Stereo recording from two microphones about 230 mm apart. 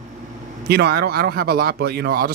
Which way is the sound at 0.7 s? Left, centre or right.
Right.